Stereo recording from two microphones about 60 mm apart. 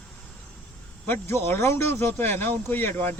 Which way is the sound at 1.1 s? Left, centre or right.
Left.